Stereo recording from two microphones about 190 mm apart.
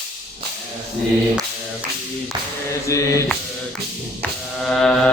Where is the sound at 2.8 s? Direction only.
15° left (ahead or behind).